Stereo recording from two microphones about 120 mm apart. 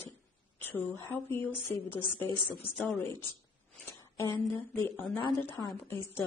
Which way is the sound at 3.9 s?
25° left (ahead or behind).